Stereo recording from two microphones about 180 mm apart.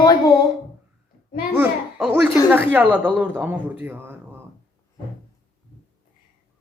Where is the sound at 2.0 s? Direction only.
Centre (ahead or behind).